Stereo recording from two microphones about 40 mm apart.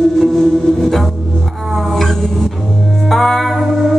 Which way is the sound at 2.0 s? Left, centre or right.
Centre.